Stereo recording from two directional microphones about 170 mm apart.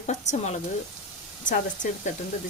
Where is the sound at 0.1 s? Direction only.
45° left (ahead or behind).